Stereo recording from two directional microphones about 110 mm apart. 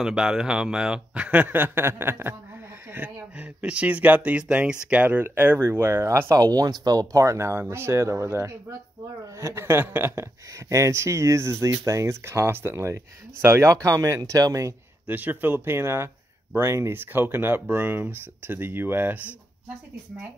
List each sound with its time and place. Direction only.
0.0 s speech: 5° right (ahead or behind); by 14.8 s 30° right (ahead or behind)
15.0 s speech: 15° right (ahead or behind)